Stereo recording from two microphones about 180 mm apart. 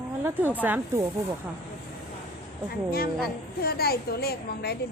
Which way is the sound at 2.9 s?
55° left (ahead or behind).